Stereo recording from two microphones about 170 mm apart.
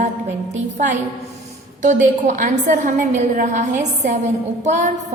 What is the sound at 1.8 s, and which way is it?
A woman's voice, 45° right (ahead or behind).